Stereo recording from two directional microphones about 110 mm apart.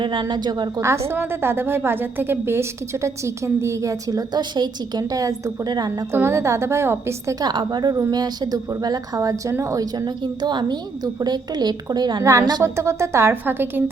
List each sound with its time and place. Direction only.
0.0 s a woman's voice: 45° right (ahead or behind)
0.8 s a woman's voice: 25° right (ahead or behind)
6.1 s a woman's voice: 25° right (ahead or behind)
7.4 s speech: 40° right (ahead or behind)
10.4 s speech: 40° right (ahead or behind)
12.2 s a woman's voice: 30° right (ahead or behind)